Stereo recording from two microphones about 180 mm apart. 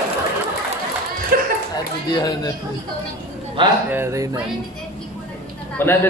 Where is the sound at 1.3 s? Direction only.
50° right (ahead or behind).